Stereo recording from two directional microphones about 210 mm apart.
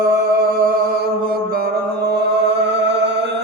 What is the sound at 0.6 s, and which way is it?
Music, 45° right (ahead or behind).